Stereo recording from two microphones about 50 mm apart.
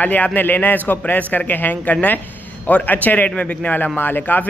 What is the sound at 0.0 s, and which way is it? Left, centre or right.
A man's voice, left.